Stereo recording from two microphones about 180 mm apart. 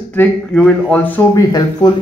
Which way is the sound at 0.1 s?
10° left (ahead or behind).